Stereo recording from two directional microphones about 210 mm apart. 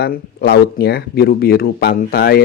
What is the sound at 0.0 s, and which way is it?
Speech, 50° left (ahead or behind).